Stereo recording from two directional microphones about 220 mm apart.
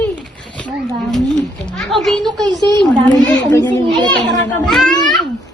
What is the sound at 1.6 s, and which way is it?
Speech, centre (ahead or behind).